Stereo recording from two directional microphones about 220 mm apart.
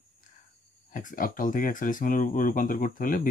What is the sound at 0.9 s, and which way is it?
Speech, 40° left (ahead or behind).